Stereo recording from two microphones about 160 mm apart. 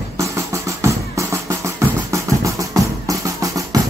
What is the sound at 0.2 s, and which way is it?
Music, 20° right (ahead or behind).